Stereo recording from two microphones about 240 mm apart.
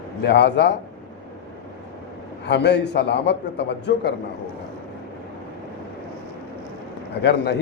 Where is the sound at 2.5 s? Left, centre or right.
Left.